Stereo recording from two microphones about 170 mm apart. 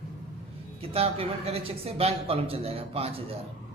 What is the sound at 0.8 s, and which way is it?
Speech, 35° right (ahead or behind).